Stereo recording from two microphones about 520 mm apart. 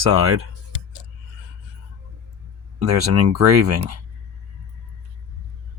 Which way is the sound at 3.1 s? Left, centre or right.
Right.